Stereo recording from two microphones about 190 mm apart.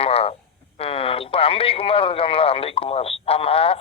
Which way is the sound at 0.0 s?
30° left (ahead or behind).